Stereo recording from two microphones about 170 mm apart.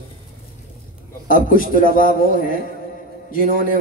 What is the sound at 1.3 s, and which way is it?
A man's voice, 55° left (ahead or behind).